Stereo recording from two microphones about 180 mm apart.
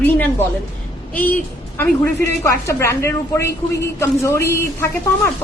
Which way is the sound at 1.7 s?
15° left (ahead or behind).